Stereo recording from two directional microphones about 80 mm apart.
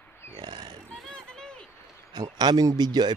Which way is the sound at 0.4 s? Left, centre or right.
Right.